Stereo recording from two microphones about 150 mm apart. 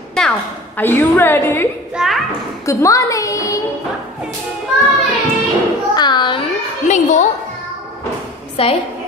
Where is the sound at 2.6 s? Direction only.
20° left (ahead or behind).